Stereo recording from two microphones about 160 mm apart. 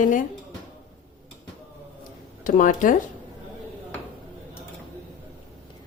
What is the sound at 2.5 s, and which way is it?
Speech, 55° left (ahead or behind).